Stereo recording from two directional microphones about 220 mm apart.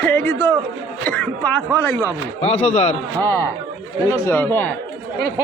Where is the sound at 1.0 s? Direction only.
5° left (ahead or behind).